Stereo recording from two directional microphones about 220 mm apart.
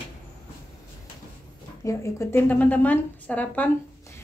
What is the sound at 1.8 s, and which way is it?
A woman's voice, 15° left (ahead or behind).